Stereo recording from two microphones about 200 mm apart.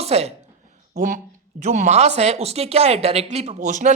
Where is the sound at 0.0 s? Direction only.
30° right (ahead or behind).